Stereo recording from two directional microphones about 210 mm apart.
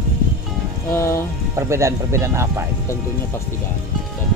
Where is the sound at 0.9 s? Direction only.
10° left (ahead or behind).